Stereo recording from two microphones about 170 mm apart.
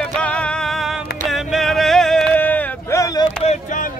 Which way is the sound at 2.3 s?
10° left (ahead or behind).